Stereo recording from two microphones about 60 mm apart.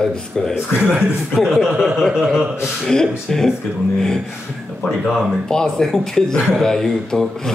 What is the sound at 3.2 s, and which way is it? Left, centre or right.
Speech, centre.